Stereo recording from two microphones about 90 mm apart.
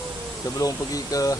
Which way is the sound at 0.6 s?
40° left (ahead or behind).